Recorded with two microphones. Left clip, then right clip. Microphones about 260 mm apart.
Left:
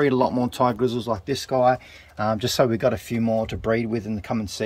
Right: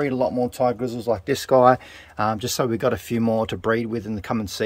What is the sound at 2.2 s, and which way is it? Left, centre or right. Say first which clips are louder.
Speech: left 3 dB; centre.